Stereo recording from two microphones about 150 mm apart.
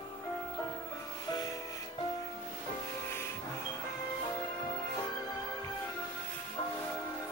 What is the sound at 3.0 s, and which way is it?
Music, 15° left (ahead or behind).